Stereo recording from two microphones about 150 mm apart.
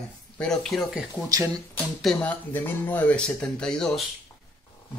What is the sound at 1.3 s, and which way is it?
Speech, 20° right (ahead or behind).